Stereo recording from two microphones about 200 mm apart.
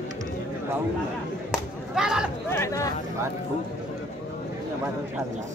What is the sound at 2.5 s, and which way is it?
Speech, 15° left (ahead or behind).